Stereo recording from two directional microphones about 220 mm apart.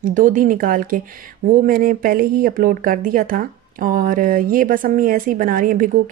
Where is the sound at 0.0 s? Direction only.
35° right (ahead or behind).